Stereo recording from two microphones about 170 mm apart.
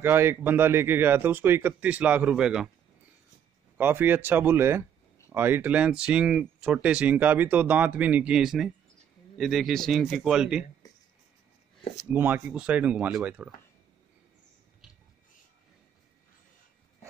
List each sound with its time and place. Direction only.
0.0 s speech: 15° right (ahead or behind)
3.7 s speech: 10° right (ahead or behind)
10.8 s a sound: 20° left (ahead or behind)
12.0 s speech: 10° right (ahead or behind)